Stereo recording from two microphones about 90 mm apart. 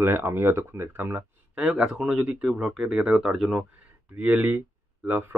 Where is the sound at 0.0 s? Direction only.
25° right (ahead or behind); by 3.6 s 5° right (ahead or behind).